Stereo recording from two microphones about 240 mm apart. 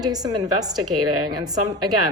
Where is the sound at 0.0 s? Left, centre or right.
Centre.